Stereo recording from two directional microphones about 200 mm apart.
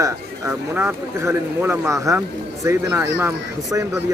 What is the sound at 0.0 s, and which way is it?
Speech, 10° right (ahead or behind).